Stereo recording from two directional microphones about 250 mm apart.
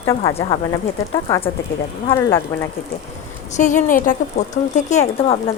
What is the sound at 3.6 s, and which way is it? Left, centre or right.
A woman's voice, left.